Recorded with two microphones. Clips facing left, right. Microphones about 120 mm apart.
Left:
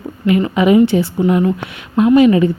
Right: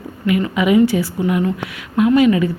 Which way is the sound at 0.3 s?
30° left (ahead or behind).